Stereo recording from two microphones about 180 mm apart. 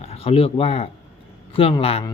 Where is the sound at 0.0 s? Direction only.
35° left (ahead or behind).